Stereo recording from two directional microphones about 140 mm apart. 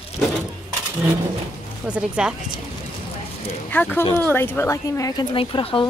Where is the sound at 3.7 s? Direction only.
10° left (ahead or behind).